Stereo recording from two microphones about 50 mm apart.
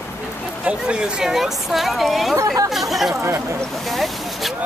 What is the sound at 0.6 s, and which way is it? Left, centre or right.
Speech, right.